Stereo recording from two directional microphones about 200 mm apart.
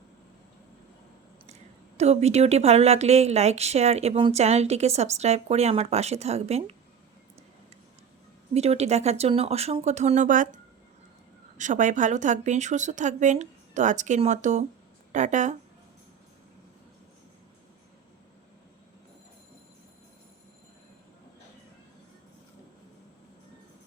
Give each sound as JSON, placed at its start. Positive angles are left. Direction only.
{"t": 2.0, "sound": "a woman's voice", "side_deg": -35}
{"t": 8.5, "sound": "a woman's voice", "side_deg": -30}